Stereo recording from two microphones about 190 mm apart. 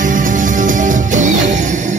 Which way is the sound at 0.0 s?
45° right (ahead or behind).